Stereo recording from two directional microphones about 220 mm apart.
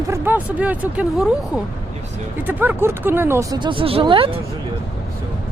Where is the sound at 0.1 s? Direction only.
10° right (ahead or behind).